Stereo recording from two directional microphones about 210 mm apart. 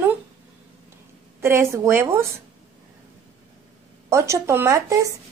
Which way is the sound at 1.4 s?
10° right (ahead or behind).